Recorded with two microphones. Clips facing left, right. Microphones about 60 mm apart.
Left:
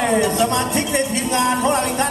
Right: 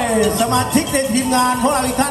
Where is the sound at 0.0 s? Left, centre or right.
Left.